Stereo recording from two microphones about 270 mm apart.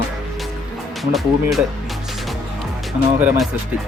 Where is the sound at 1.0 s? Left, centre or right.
Centre.